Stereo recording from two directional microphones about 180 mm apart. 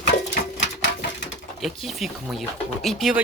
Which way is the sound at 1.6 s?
Centre (ahead or behind).